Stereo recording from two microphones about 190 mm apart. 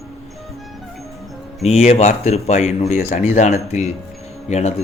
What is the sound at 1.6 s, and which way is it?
A man's voice, 35° left (ahead or behind).